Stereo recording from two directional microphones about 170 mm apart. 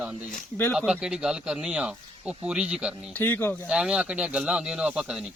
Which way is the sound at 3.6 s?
5° right (ahead or behind).